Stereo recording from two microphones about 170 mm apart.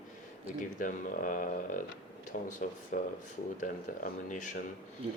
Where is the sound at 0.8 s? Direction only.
50° left (ahead or behind).